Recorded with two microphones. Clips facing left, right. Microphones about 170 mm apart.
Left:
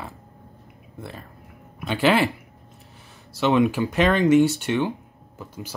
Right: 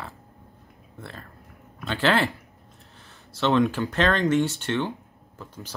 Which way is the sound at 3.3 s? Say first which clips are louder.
Left 2 dB; 10° left (ahead or behind).